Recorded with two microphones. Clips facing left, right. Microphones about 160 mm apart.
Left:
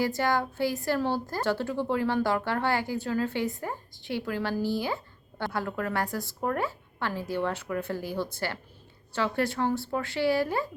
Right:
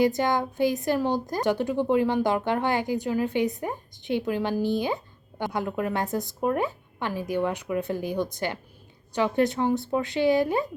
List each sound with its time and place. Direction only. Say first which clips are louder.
0.0 s a woman's voice: right 4 dB; 20° right (ahead or behind)